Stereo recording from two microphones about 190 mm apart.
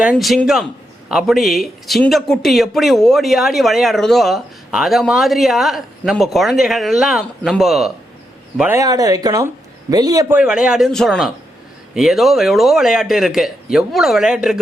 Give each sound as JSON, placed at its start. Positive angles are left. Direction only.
{"t": 0.0, "sound": "speech", "side_deg": -5}
{"t": 10.2, "sound": "speech", "side_deg": -5}